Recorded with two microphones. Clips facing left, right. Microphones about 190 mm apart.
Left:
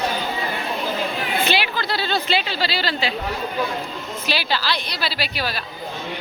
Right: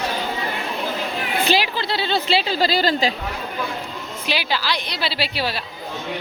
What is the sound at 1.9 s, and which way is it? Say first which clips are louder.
Speech: right 2 dB; 25° right (ahead or behind).